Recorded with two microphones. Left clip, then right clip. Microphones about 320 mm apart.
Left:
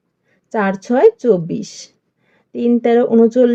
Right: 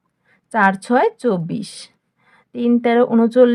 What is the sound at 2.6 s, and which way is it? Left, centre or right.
Speech, right.